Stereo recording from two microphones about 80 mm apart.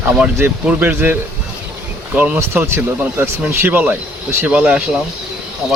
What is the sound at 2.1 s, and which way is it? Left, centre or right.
Speech, centre.